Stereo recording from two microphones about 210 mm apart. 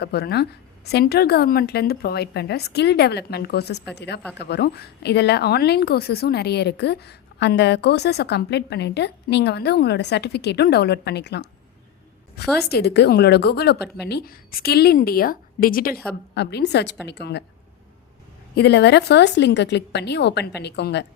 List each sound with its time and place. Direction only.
0.0 s a woman's voice: 50° left (ahead or behind)
18.5 s speech: 50° left (ahead or behind)